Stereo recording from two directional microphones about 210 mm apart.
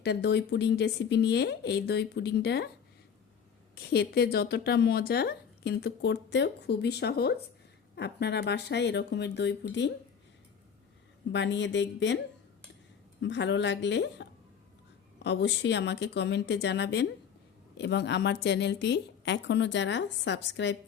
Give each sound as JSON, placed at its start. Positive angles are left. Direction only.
{"t": 0.0, "sound": "speech", "side_deg": 55}
{"t": 3.8, "sound": "speech", "side_deg": 50}
{"t": 11.3, "sound": "a woman's voice", "side_deg": 55}
{"t": 13.2, "sound": "a woman's voice", "side_deg": 60}